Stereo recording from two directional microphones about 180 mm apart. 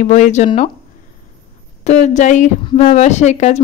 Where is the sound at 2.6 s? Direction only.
30° left (ahead or behind).